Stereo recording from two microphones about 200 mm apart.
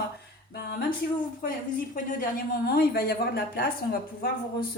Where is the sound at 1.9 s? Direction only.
40° left (ahead or behind).